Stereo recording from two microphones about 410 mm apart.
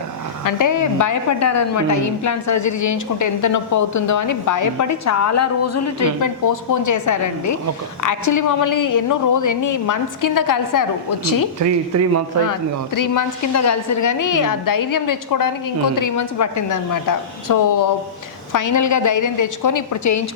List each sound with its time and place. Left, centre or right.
0.4 s a woman's voice: left
11.6 s speech: right
12.5 s a woman's voice: left